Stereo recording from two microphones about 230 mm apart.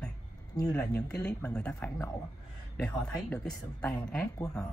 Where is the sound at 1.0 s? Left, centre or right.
Centre.